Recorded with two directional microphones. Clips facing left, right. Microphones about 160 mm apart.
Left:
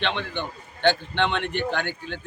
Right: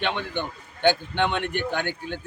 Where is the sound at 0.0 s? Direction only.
10° right (ahead or behind).